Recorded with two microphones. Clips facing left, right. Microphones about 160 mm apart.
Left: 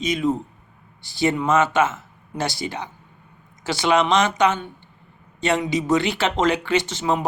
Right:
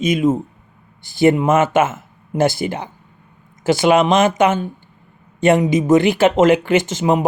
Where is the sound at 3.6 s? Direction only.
50° right (ahead or behind).